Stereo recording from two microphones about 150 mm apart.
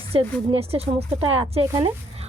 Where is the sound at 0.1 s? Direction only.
40° right (ahead or behind).